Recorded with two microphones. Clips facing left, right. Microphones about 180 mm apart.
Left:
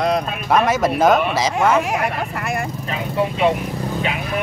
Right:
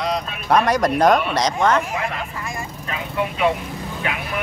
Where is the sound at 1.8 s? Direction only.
75° left (ahead or behind).